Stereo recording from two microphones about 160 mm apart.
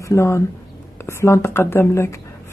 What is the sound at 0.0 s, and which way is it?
A woman's voice, 20° left (ahead or behind).